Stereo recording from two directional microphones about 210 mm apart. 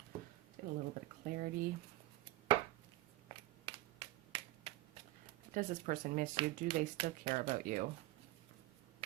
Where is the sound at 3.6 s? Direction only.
25° right (ahead or behind).